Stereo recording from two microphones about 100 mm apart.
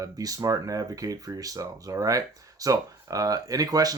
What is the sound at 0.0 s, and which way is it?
Speech, 35° right (ahead or behind).